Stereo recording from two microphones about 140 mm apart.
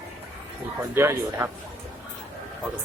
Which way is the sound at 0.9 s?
15° right (ahead or behind).